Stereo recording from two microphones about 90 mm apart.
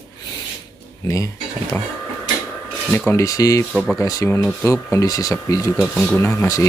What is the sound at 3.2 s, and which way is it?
Speech, 40° left (ahead or behind).